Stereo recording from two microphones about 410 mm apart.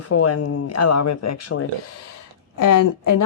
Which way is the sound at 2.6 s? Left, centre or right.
Left.